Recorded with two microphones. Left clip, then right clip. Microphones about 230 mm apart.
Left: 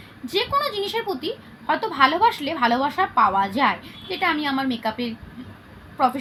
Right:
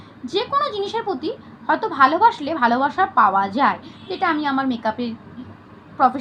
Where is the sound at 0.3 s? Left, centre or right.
Centre.